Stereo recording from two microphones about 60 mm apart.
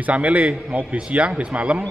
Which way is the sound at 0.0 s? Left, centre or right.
Right.